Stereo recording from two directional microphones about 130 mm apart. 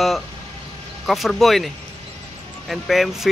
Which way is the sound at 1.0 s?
Centre (ahead or behind).